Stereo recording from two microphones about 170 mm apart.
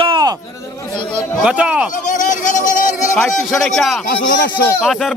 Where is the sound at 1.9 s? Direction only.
50° left (ahead or behind).